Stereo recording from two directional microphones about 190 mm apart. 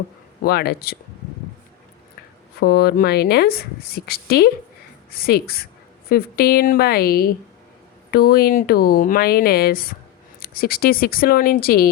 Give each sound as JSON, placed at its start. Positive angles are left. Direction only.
{"t": 0.4, "sound": "a woman's voice", "side_deg": 55}
{"t": 2.6, "sound": "a woman's voice", "side_deg": 55}